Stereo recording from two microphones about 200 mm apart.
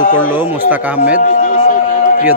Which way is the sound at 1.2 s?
45° left (ahead or behind).